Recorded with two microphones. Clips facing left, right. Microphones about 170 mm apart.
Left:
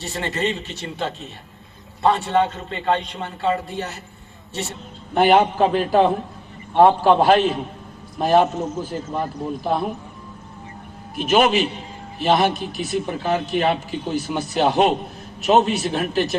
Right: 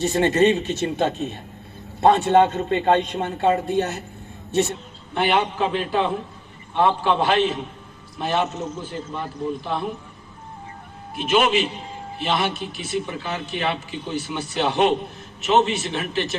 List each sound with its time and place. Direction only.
0.1 s a man's voice: 45° right (ahead or behind)
5.1 s a man's voice: 40° left (ahead or behind)
11.2 s a man's voice: 40° left (ahead or behind)